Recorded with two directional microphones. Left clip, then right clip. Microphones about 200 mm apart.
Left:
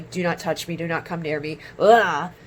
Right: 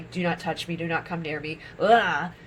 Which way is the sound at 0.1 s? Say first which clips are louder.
Left 4 dB; 45° left (ahead or behind).